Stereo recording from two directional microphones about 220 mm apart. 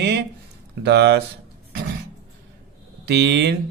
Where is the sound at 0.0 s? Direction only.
50° right (ahead or behind).